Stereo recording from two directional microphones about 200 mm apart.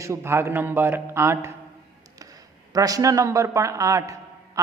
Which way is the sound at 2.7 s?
15° right (ahead or behind).